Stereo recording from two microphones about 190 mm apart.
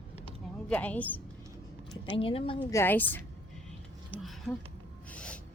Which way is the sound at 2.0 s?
30° left (ahead or behind).